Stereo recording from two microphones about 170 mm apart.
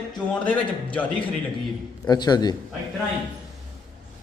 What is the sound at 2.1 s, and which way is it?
Speech, 25° left (ahead or behind).